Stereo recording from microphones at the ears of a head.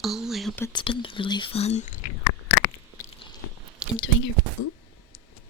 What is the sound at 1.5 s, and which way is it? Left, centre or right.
Biting, left.